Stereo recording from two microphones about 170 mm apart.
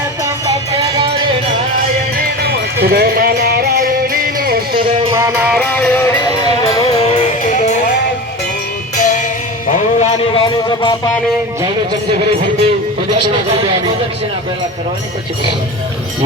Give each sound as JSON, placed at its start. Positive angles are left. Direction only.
{"t": 2.1, "sound": "music", "side_deg": -65}
{"t": 4.8, "sound": "music", "side_deg": -30}
{"t": 5.1, "sound": "music", "side_deg": -15}
{"t": 5.5, "sound": "music", "side_deg": 10}
{"t": 6.8, "sound": "music", "side_deg": 40}
{"t": 9.0, "sound": "music", "side_deg": 45}
{"t": 10.3, "sound": "music", "side_deg": 25}